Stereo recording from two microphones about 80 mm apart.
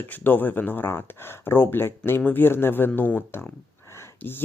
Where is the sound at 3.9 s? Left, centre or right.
Left.